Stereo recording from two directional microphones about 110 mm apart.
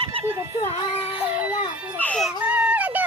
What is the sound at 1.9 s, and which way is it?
Baby cry, 15° left (ahead or behind).